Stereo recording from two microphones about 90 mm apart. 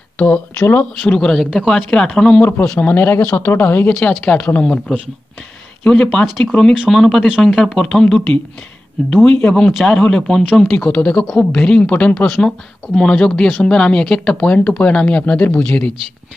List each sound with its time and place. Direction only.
0.6 s speech: 25° left (ahead or behind)
1.1 s speech: 5° left (ahead or behind)
2.9 s speech: 20° left (ahead or behind)
3.9 s speech: 10° left (ahead or behind)
6.9 s speech: 5° left (ahead or behind)
7.2 s speech: 10° right (ahead or behind)
7.5 s speech: 5° left (ahead or behind)
9.4 s speech: 20° left (ahead or behind)